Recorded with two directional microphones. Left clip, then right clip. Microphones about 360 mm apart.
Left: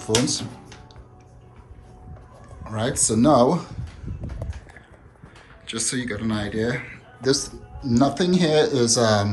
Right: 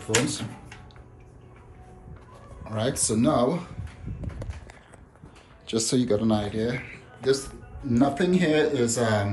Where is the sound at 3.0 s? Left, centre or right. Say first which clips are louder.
Left 7 dB; centre.